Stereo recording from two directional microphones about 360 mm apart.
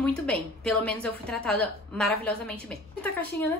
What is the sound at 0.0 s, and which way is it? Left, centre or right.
A woman's voice, centre.